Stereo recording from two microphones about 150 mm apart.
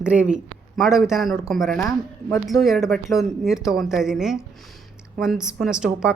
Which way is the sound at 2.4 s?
Centre (ahead or behind).